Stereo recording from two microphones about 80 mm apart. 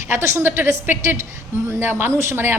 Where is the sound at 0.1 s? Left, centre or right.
Right.